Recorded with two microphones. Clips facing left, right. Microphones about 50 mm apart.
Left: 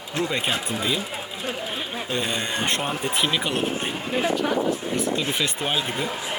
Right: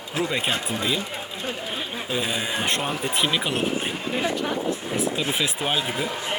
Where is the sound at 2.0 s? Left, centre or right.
Centre.